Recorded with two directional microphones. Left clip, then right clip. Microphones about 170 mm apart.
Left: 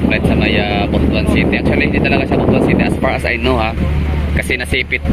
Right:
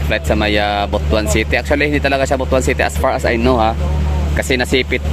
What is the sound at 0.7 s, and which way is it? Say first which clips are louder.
Speech: even; 35° right (ahead or behind).